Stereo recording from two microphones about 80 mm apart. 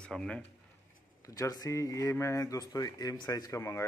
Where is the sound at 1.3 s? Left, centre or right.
Left.